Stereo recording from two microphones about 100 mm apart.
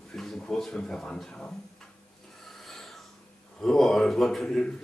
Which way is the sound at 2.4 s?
5° left (ahead or behind).